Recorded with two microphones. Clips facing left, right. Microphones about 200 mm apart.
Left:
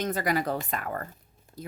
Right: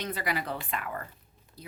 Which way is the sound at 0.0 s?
45° left (ahead or behind).